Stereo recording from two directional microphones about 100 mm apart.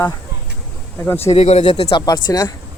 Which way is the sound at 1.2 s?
90° left.